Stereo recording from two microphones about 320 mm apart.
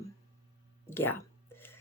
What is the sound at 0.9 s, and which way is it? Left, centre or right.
Speech, centre.